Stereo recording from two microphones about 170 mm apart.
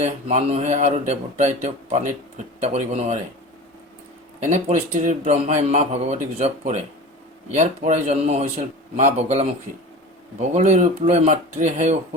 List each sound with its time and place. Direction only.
0.0 s speech: 40° right (ahead or behind)
4.4 s speech: 45° right (ahead or behind)
10.5 s speech: 40° right (ahead or behind)